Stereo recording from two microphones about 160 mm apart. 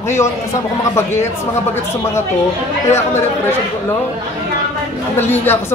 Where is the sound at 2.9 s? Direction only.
15° left (ahead or behind).